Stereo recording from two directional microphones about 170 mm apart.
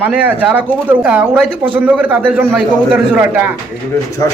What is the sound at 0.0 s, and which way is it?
Speech, 10° right (ahead or behind).